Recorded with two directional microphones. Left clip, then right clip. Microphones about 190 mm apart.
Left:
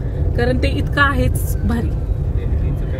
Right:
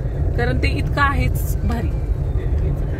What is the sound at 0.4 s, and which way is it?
Speech, centre (ahead or behind).